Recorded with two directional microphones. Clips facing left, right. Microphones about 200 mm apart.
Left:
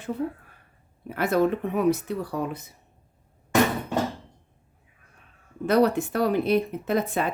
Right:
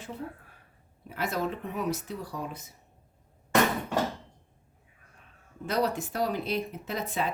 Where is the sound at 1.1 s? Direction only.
60° left (ahead or behind).